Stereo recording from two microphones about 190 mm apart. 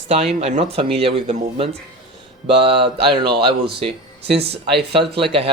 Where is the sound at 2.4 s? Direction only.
30° right (ahead or behind).